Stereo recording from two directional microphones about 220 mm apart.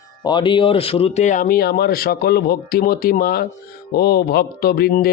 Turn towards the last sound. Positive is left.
turn(degrees=45)  # may be behind; listen again after turning